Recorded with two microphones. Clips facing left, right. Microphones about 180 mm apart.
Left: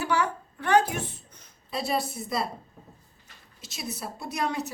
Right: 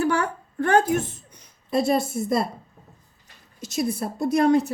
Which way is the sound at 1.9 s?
50° right (ahead or behind).